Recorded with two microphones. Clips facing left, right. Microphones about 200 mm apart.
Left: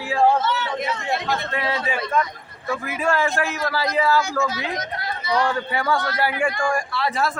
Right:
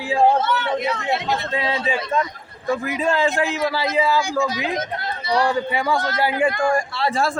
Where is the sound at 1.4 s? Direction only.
20° right (ahead or behind).